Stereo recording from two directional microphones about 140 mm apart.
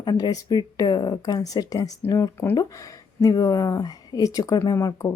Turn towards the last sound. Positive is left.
turn(degrees=25)  # may be behind; listen again after turning